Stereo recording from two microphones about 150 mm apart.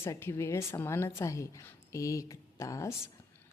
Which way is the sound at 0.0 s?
20° left (ahead or behind).